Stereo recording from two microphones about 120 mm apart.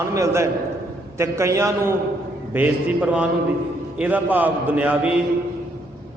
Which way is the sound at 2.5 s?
10° right (ahead or behind).